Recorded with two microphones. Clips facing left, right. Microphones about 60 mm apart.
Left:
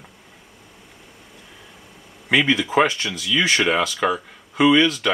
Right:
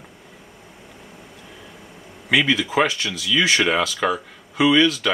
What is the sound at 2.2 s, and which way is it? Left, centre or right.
Speech, centre.